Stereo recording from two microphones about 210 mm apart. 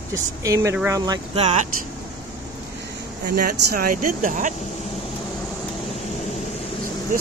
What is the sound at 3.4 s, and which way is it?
Speech, 40° right (ahead or behind).